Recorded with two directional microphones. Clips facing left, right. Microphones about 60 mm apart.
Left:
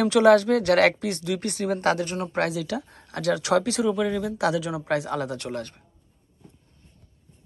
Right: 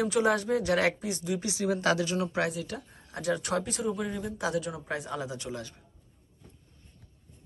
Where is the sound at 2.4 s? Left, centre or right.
Left.